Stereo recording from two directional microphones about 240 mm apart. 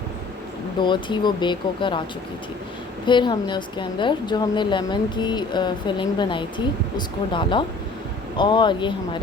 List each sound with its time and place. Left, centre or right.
0.8 s a woman's voice: centre
3.1 s a woman's voice: centre